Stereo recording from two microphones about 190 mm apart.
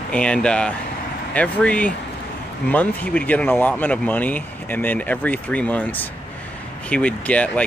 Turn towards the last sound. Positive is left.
turn(degrees=5)  # may be behind; listen again after turning